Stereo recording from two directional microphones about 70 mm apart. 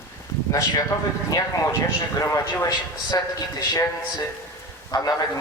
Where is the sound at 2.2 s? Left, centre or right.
Left.